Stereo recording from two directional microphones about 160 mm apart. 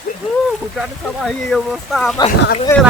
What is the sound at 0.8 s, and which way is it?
Speech, centre (ahead or behind).